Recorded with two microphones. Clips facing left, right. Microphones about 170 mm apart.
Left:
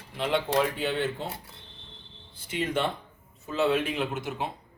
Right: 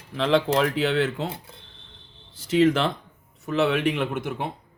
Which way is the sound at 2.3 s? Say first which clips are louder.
Right 10 dB; 90° right.